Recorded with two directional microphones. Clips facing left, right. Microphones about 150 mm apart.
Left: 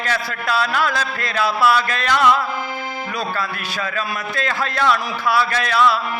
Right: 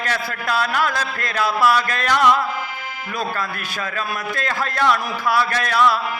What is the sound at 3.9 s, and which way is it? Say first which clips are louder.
Speech: left 1 dB; 45° right (ahead or behind).